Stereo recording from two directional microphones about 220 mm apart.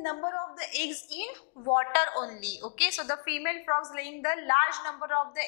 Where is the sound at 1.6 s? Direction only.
25° left (ahead or behind).